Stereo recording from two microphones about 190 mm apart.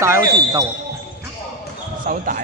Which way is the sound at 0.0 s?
15° right (ahead or behind).